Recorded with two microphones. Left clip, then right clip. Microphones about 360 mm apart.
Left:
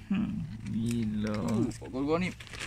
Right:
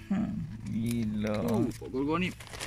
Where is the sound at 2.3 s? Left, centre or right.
Centre.